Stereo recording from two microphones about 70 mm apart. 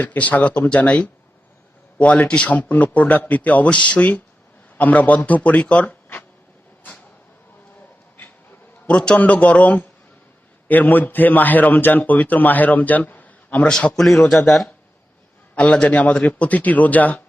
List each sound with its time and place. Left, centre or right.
0.0 s a man's voice: left
8.9 s a man's voice: centre
13.7 s a man's voice: centre
15.5 s a man's voice: centre